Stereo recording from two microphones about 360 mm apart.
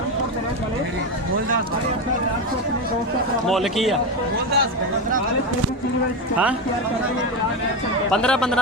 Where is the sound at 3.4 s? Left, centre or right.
Centre.